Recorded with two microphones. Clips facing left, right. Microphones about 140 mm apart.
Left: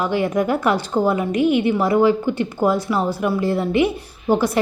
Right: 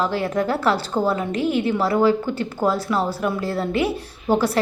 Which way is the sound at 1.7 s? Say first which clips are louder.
Left 2 dB; 15° left (ahead or behind).